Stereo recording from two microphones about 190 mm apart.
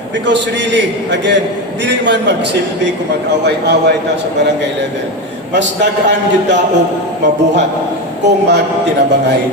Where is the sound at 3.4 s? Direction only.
60° right (ahead or behind).